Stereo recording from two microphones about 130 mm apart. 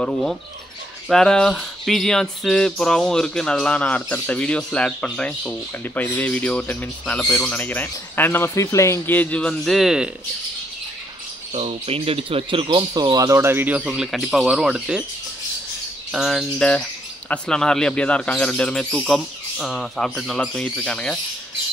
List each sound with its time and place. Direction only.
0.0 s a man's voice: 5° left (ahead or behind)
11.5 s speech: 50° right (ahead or behind); by 15.0 s 5° right (ahead or behind)
16.1 s a man's voice: centre (ahead or behind)